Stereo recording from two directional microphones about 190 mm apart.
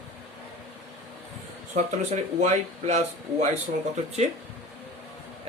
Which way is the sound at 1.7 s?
40° right (ahead or behind).